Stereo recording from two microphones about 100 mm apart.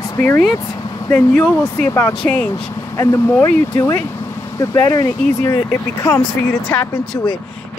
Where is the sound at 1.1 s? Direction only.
10° left (ahead or behind); by 6.2 s 30° left (ahead or behind).